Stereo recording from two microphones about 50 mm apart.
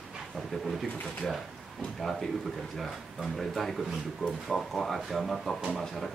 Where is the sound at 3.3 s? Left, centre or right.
Centre.